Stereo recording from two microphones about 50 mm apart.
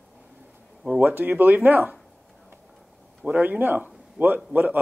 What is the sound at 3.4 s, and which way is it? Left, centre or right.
A man's voice, right.